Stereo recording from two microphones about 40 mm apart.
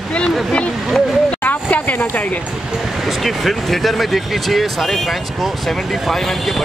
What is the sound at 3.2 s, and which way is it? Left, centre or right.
Speech, centre.